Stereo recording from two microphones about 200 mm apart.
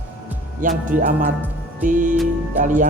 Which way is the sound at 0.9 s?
40° right (ahead or behind).